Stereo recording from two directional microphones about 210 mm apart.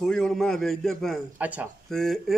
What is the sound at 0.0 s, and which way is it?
A man's voice, centre (ahead or behind).